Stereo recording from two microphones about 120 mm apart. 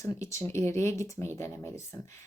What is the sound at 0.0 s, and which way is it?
Speech, 25° left (ahead or behind).